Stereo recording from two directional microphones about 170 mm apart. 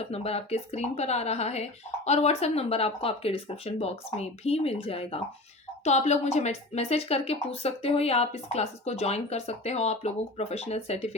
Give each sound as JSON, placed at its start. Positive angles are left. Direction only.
{"t": 0.0, "sound": "speech", "side_deg": 35}